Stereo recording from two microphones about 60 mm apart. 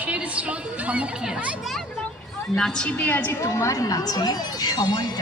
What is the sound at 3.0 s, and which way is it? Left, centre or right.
Speech, left.